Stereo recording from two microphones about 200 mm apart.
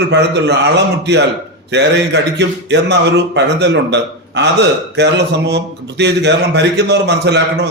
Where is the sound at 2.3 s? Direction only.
60° right (ahead or behind).